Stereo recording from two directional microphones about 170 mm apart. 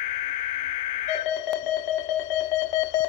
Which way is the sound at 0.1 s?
35° left (ahead or behind).